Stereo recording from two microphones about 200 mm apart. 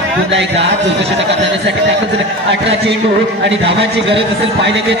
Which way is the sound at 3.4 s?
60° right (ahead or behind).